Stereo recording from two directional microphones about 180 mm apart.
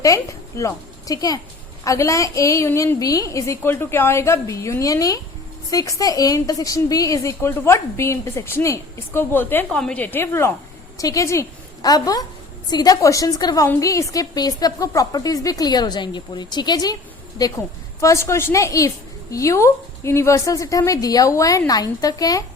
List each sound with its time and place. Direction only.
0.0 s a woman's voice: 20° left (ahead or behind)